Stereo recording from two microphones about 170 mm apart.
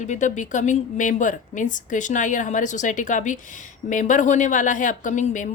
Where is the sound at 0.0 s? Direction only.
45° left (ahead or behind).